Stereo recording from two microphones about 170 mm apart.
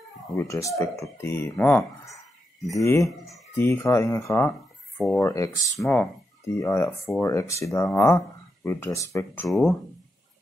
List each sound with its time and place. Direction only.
0.4 s speech: 20° left (ahead or behind)
4.9 s speech: centre (ahead or behind)
5.2 s speech: 15° left (ahead or behind)
9.5 s speech: centre (ahead or behind)